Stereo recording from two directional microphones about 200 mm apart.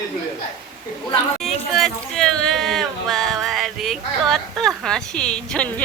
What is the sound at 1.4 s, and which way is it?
Speech, centre (ahead or behind).